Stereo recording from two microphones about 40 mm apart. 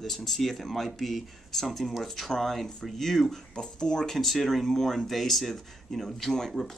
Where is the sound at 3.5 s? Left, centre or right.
Left.